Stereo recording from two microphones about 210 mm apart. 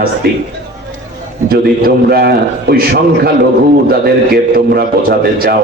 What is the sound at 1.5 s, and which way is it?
A man's voice, 45° right (ahead or behind).